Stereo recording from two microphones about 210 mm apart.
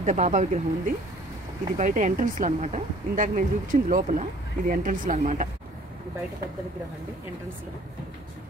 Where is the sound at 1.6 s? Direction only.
40° right (ahead or behind).